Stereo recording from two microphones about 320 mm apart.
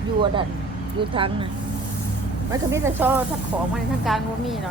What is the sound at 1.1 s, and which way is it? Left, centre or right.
Speech, centre.